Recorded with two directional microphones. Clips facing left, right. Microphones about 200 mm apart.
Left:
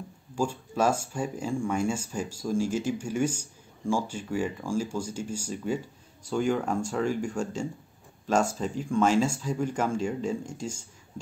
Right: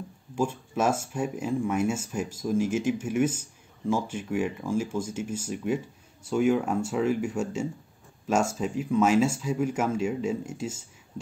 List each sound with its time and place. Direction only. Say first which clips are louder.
0.4 s speech: even; 5° right (ahead or behind)
2.5 s speech: right 2 dB; 35° left (ahead or behind)
2.9 s speech: right 3 dB; 5° right (ahead or behind)